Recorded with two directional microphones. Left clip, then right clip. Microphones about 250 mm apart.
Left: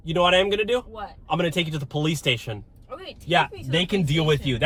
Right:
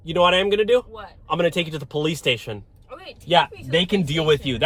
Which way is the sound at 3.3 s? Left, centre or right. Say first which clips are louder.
Right 4 dB; right.